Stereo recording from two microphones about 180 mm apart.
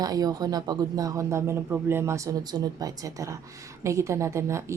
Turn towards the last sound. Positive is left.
turn(degrees=-15)  # may be behind; listen again after turning